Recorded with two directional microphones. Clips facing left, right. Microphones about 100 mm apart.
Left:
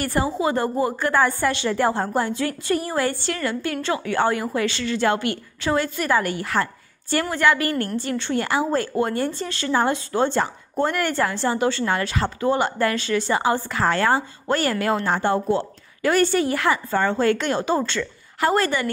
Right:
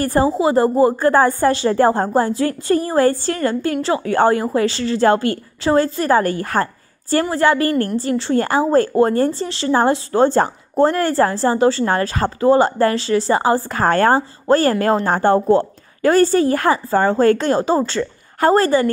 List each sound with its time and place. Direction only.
0.0 s a woman's voice: 35° right (ahead or behind)
0.4 s a woman's voice: 25° right (ahead or behind)
0.9 s a woman's voice: 40° right (ahead or behind)
9.8 s a woman's voice: 40° right (ahead or behind)